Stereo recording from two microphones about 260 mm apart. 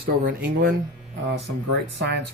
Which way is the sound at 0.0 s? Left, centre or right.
Right.